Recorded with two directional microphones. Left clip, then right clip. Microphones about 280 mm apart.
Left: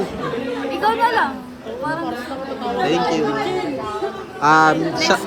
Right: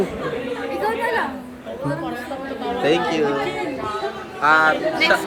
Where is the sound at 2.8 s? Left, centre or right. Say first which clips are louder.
Even; centre.